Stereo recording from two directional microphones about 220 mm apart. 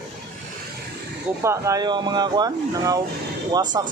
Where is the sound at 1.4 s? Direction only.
15° right (ahead or behind).